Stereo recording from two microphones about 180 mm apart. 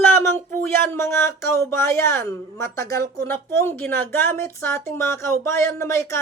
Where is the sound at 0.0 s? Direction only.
15° left (ahead or behind).